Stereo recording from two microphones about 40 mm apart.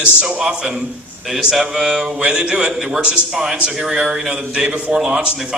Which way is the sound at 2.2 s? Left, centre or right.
Right.